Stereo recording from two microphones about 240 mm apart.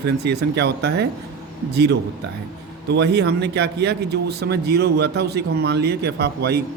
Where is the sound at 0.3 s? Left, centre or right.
Right.